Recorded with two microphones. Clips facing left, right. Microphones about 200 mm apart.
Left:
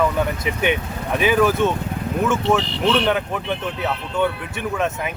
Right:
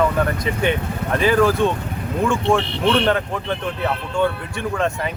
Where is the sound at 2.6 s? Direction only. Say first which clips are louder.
Right 1 dB; 60° right (ahead or behind).